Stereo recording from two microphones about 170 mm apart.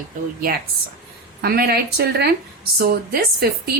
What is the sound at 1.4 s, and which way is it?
Speech, 65° right (ahead or behind).